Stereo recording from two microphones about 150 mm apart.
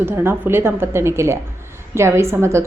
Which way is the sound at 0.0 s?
15° right (ahead or behind).